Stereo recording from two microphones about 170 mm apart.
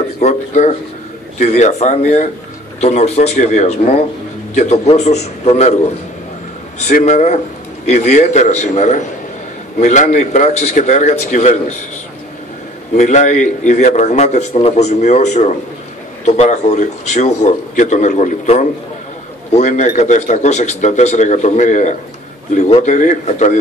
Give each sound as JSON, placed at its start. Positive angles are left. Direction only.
{"t": 0.2, "sound": "a man's voice", "side_deg": 40}
{"t": 6.9, "sound": "a man's voice", "side_deg": 45}
{"t": 12.9, "sound": "a man's voice", "side_deg": 45}